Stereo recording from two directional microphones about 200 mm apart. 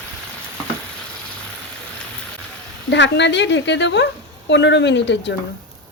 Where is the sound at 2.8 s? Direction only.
60° left (ahead or behind).